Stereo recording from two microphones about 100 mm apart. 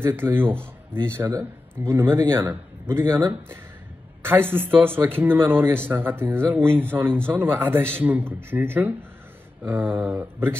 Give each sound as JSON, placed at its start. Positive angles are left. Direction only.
{"t": 0.0, "sound": "a man's voice", "side_deg": -25}
{"t": 4.2, "sound": "a man's voice", "side_deg": -20}